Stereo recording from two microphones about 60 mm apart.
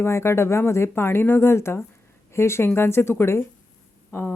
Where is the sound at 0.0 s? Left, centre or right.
Left.